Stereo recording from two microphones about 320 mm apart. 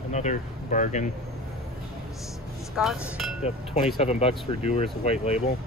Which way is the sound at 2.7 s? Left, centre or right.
Centre.